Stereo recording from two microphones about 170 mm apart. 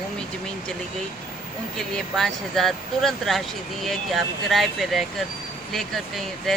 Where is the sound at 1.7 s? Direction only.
5° left (ahead or behind).